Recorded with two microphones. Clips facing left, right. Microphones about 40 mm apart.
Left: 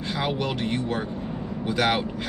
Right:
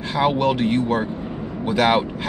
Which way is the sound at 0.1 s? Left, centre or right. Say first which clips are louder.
Right 9 dB; centre.